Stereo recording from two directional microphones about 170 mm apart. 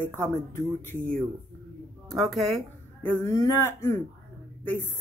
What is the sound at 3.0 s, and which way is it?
Speech, 15° left (ahead or behind).